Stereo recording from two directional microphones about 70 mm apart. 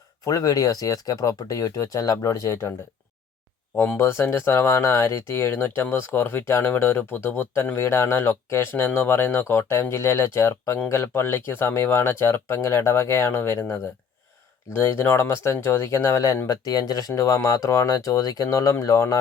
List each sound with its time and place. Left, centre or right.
0.3 s speech: left
3.8 s speech: left
16.5 s speech: left